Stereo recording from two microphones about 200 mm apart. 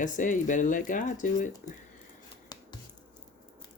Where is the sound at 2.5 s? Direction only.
20° left (ahead or behind).